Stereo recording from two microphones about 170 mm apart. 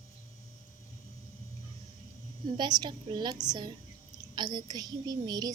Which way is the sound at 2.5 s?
25° right (ahead or behind).